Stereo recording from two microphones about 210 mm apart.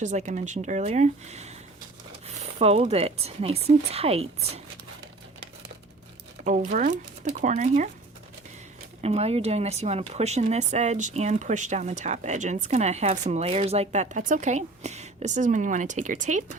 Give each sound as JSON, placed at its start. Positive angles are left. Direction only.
{"t": 0.0, "sound": "speech", "side_deg": -35}
{"t": 6.4, "sound": "speech", "side_deg": -35}
{"t": 9.0, "sound": "speech", "side_deg": -30}